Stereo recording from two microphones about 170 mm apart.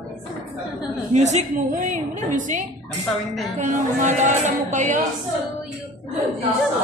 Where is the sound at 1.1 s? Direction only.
45° right (ahead or behind).